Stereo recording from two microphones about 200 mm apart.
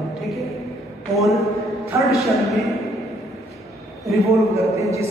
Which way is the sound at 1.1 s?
Centre (ahead or behind).